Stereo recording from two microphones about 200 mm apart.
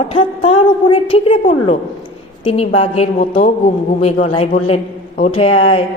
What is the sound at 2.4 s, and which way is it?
A woman's voice, 30° left (ahead or behind).